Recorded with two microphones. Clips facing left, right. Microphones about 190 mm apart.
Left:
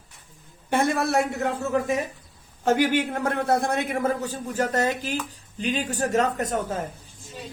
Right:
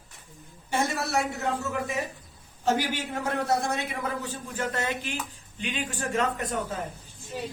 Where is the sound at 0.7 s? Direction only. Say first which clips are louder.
Left 5 dB; 60° left (ahead or behind).